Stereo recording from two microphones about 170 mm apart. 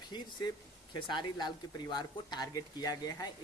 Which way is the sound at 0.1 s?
25° left (ahead or behind).